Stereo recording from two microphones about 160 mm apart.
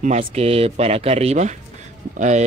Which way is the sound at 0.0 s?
45° right (ahead or behind).